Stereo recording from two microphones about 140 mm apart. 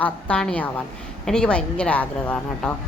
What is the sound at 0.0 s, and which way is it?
A woman's voice, 5° left (ahead or behind).